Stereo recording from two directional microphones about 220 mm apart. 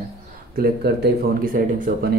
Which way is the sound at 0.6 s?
45° right (ahead or behind).